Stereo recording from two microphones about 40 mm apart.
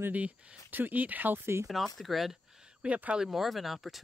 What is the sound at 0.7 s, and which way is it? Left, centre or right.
Speech, right.